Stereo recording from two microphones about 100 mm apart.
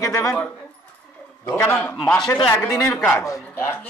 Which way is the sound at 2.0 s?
5° left (ahead or behind).